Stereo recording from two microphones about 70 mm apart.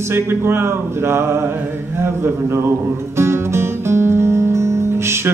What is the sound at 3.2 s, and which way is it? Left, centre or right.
Music, right.